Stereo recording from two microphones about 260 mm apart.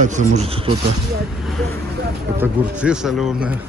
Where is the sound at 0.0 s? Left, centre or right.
Right.